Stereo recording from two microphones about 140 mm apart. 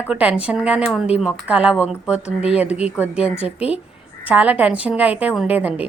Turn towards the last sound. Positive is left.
turn(degrees=-10)  # may be behind; listen again after turning